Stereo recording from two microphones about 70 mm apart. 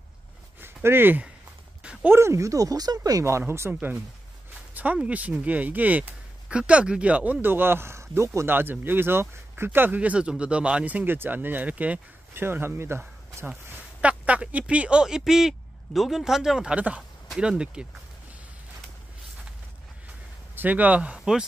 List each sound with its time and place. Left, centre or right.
0.8 s speech: right
1.8 s a sound: centre
2.1 s speech: right
3.3 s speech: right
4.9 s speech: centre
7.4 s speech: right
8.5 s speech: right
9.9 s speech: centre
12.4 s speech: right
13.7 s a sound: right
14.7 s speech: centre
20.5 s speech: right
21.2 s speech: centre